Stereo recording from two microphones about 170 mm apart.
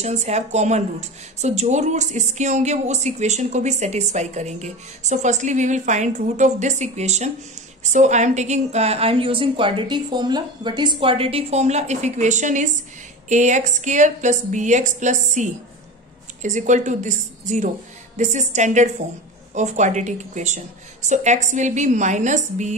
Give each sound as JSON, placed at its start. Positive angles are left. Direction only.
{"t": 0.0, "sound": "a woman's voice", "side_deg": -40}